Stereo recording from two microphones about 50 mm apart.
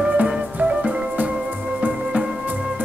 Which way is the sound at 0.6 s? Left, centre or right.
Right.